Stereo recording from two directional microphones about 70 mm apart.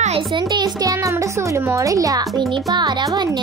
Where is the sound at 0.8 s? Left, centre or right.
Right.